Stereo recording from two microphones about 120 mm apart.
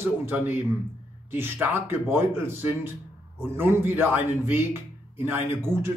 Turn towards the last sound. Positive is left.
turn(degrees=-20)  # may be behind; listen again after turning